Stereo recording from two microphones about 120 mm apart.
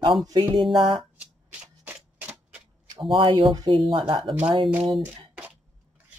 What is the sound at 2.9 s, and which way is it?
Speech, 45° right (ahead or behind).